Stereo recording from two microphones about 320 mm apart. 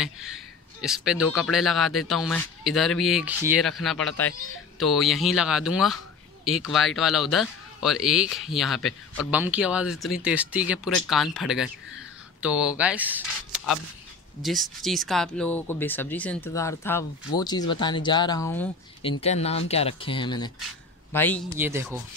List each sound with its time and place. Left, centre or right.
0.0 s speech: centre
19.0 s a woman's voice: centre
21.5 s speech: centre